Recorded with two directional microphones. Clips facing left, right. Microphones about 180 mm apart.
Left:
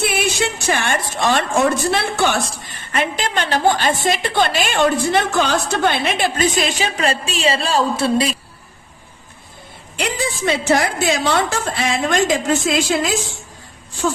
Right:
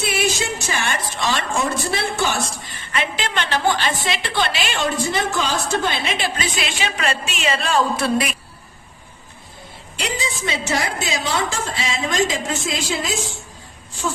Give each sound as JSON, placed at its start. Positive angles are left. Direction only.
{"t": 0.0, "sound": "a woman's voice", "side_deg": 55}
{"t": 10.0, "sound": "a woman's voice", "side_deg": 55}